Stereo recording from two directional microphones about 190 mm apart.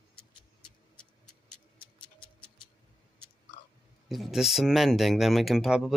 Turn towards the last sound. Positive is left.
turn(degrees=-5)  # may be behind; listen again after turning